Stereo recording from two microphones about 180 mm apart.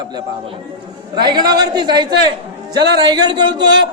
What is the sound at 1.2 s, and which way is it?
A man's voice, 25° right (ahead or behind).